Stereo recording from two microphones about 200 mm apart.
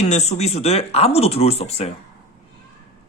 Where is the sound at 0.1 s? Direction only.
35° left (ahead or behind).